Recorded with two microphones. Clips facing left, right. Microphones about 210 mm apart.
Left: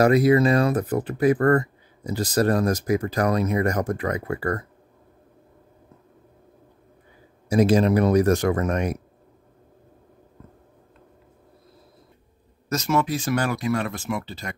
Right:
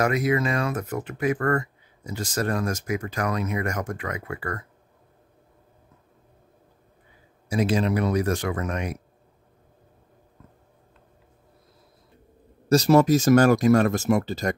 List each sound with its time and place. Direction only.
0.0 s speech: 35° left (ahead or behind)
7.4 s speech: 40° left (ahead or behind)
12.6 s speech: 35° right (ahead or behind)